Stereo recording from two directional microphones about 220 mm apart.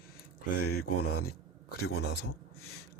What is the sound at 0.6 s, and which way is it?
Mantra, 90° left.